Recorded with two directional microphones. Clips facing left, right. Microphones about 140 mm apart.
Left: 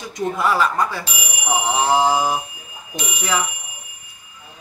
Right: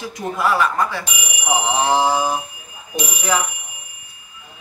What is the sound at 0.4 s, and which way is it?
Speech, centre (ahead or behind).